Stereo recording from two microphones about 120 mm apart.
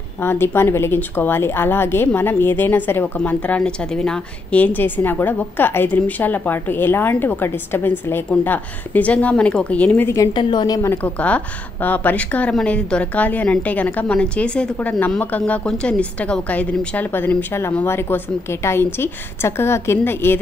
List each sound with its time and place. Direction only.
0.2 s a woman's voice: 20° left (ahead or behind)
10.2 s a woman's voice: 40° left (ahead or behind)
11.1 s a woman's voice: 10° left (ahead or behind)